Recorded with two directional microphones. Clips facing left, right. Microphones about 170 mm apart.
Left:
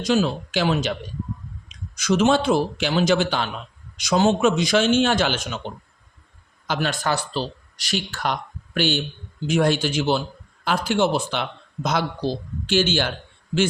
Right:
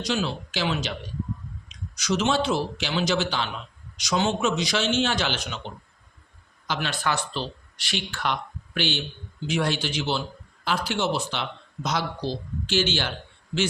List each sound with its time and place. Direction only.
0.0 s speech: 50° left (ahead or behind)
2.0 s speech: 50° left (ahead or behind)
6.7 s speech: 45° left (ahead or behind)